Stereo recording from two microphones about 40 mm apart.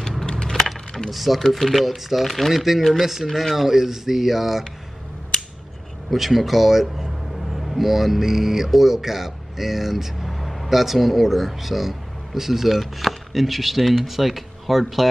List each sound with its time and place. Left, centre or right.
0.3 s a sound: left
1.1 s speech: centre
6.0 s speech: centre